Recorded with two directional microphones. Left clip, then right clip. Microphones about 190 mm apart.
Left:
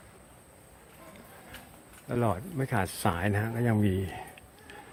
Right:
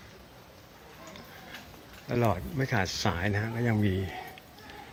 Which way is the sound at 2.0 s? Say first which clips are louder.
Right 1 dB; 15° left (ahead or behind).